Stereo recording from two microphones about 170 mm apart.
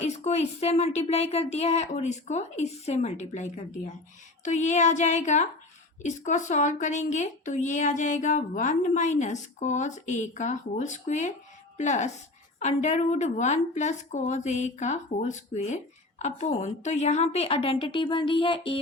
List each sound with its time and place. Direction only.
0.0 s a woman's voice: 40° left (ahead or behind)